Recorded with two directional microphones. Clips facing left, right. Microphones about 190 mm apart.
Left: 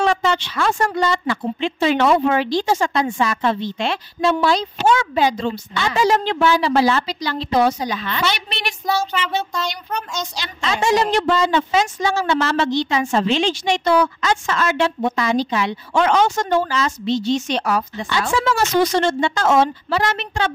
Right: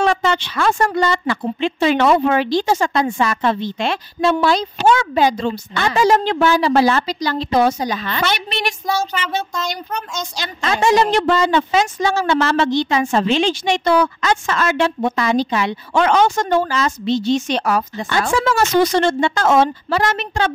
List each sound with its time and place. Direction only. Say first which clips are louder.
0.0 s a woman's voice: right 1 dB; 55° right (ahead or behind)
10.3 s a woman's voice: right 4 dB; 50° right (ahead or behind)